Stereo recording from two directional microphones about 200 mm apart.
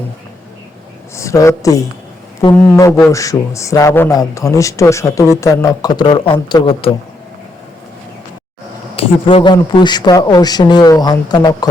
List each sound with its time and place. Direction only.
1.1 s a man's voice: 15° left (ahead or behind)
2.4 s speech: 30° left (ahead or behind)
2.7 s a man's voice: 15° left (ahead or behind)
9.0 s speech: 25° left (ahead or behind)